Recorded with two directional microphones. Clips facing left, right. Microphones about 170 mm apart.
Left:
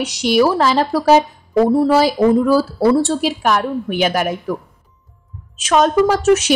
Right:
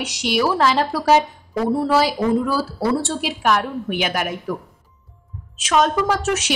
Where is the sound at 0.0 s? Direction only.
40° left (ahead or behind).